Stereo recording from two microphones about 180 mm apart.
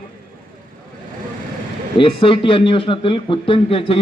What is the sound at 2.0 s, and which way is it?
Speech, 30° left (ahead or behind).